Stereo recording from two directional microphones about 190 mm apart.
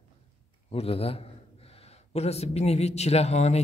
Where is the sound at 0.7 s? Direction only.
30° left (ahead or behind).